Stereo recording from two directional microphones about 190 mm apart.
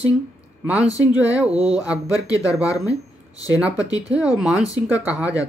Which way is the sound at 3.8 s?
20° left (ahead or behind).